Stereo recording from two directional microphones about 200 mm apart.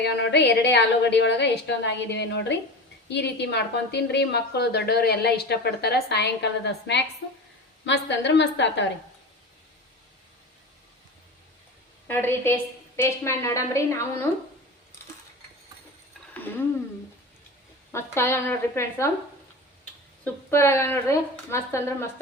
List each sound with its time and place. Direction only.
0.0 s a woman's voice: 60° left (ahead or behind)
12.0 s a woman's voice: 10° left (ahead or behind)
17.9 s a woman's voice: 10° left (ahead or behind)